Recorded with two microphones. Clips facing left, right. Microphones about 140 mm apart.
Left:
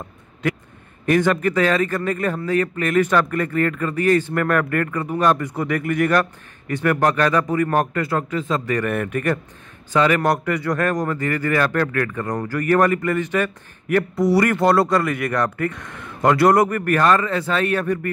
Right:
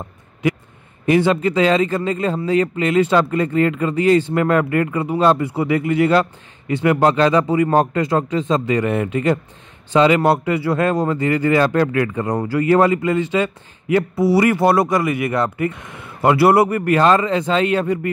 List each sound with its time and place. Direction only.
1.0 s a man's voice: 15° right (ahead or behind)
10.2 s a man's voice: 10° right (ahead or behind)